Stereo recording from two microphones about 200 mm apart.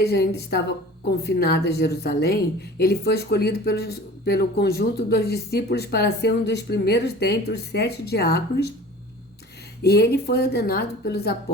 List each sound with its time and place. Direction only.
0.0 s a woman's voice: 55° left (ahead or behind)
9.8 s a woman's voice: 50° left (ahead or behind)